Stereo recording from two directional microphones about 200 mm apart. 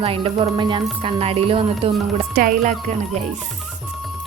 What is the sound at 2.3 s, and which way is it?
Speech, 45° right (ahead or behind).